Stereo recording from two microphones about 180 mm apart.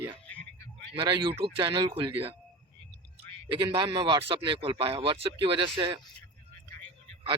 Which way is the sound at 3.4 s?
30° right (ahead or behind).